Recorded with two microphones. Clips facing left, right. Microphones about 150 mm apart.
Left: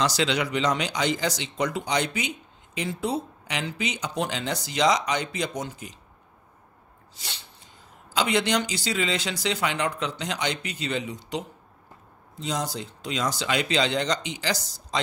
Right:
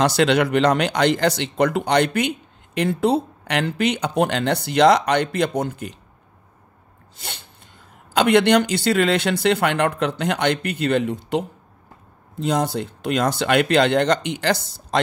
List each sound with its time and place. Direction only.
0.0 s speech: 60° right (ahead or behind)
7.2 s a sound: 55° right (ahead or behind)
8.1 s speech: 60° right (ahead or behind)